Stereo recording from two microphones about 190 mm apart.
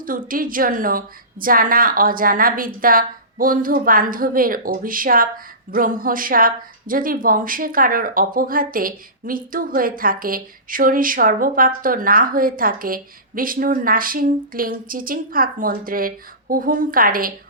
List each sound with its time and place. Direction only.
0.0 s speech: 45° right (ahead or behind)